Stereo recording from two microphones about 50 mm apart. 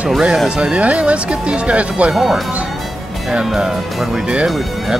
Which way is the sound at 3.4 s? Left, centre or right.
Centre.